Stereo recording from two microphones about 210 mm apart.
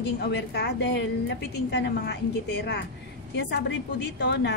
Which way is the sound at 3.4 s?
55° left (ahead or behind).